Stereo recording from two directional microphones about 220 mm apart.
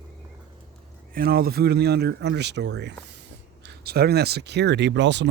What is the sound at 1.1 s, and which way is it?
Speech, 45° right (ahead or behind).